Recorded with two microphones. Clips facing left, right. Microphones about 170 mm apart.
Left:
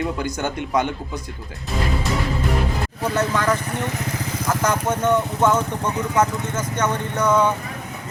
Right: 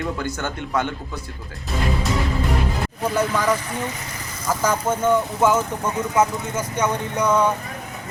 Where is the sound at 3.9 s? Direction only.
75° left (ahead or behind).